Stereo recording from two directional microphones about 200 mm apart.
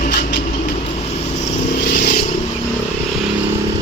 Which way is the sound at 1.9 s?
55° left (ahead or behind).